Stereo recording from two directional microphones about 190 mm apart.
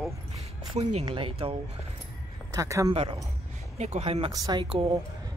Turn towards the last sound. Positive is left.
turn(degrees=-25)  # may be behind; listen again after turning